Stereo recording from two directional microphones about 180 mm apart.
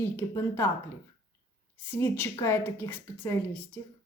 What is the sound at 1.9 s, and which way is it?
A woman's voice, 15° left (ahead or behind).